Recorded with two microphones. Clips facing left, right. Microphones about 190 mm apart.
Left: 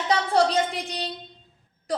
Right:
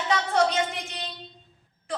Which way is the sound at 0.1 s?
35° left (ahead or behind).